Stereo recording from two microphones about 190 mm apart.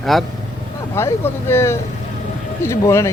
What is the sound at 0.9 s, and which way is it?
Speech, 15° left (ahead or behind).